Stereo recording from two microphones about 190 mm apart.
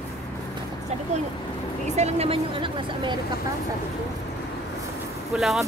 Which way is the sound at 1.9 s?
35° right (ahead or behind).